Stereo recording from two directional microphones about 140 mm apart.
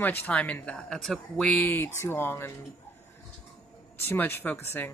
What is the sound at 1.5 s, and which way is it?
Speech, 15° left (ahead or behind).